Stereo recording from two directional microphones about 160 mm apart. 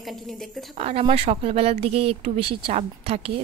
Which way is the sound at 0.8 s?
40° right (ahead or behind).